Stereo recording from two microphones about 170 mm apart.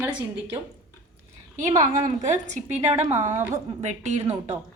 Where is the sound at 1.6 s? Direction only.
45° right (ahead or behind).